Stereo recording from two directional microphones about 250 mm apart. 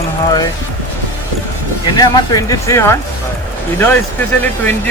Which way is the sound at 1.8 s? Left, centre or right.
Centre.